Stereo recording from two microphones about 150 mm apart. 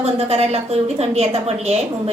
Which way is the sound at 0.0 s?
45° right (ahead or behind).